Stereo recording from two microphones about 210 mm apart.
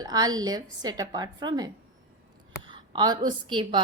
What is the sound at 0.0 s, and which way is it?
A woman's voice, 20° right (ahead or behind).